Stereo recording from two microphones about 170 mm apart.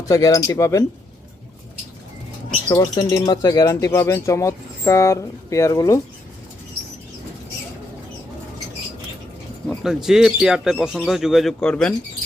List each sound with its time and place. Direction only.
0.0 s speech: 20° left (ahead or behind)
2.6 s speech: 20° left (ahead or behind)
9.6 s speech: 5° right (ahead or behind)